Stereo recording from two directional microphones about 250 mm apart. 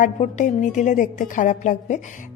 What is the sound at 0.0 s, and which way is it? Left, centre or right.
A woman's voice, left.